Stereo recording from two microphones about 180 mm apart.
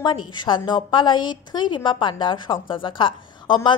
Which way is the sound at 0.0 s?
25° left (ahead or behind).